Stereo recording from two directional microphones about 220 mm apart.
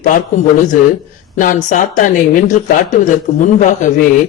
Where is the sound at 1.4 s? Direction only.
35° left (ahead or behind).